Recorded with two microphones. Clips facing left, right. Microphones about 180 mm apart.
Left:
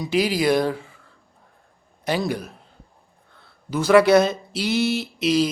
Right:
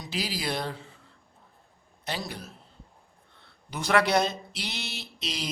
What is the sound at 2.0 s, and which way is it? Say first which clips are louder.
Speech: left 11 dB; 85° left.